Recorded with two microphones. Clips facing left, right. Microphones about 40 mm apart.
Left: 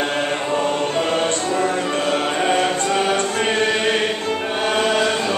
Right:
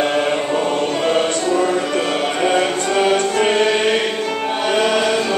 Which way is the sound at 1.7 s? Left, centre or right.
Right.